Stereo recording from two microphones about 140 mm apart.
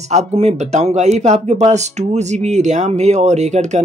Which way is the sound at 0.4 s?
55° right (ahead or behind).